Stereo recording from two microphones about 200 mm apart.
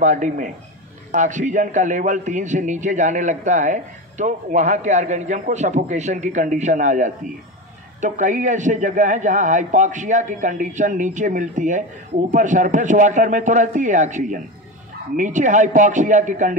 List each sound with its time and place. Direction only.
0.0 s a man's voice: 40° right (ahead or behind)